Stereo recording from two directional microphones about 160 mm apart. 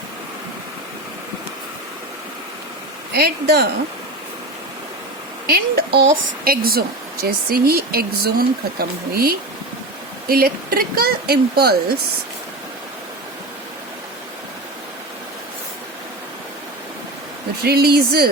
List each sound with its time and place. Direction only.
3.1 s speech: 85° right
5.5 s speech: 70° right (ahead or behind)
17.6 s speech: 80° right